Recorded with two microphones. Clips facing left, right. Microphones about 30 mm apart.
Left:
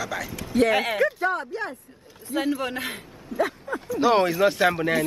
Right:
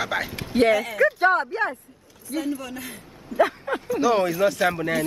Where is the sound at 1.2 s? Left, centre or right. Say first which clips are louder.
Right 6 dB; right.